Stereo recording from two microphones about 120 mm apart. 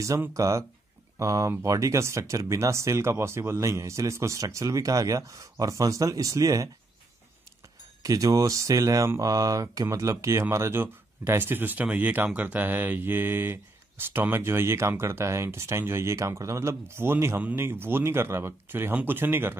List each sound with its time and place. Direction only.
0.2 s speech: 25° right (ahead or behind)
8.0 s speech: 30° right (ahead or behind)